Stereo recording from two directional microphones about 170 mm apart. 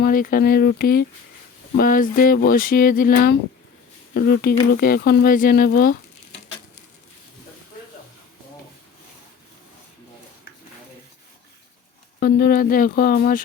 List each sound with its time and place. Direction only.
0.0 s speech: 55° left (ahead or behind)
4.1 s speech: 70° left (ahead or behind)
12.2 s speech: 60° left (ahead or behind)